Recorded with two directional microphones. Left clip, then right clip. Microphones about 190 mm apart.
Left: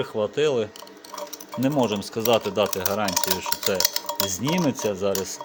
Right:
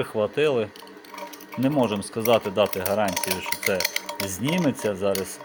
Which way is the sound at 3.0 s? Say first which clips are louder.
Left 1 dB; 10° left (ahead or behind).